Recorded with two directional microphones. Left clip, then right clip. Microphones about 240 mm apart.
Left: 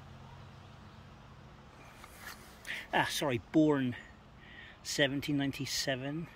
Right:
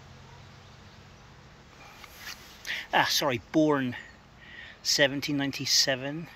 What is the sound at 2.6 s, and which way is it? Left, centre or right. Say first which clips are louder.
Speech: right 7 dB; centre.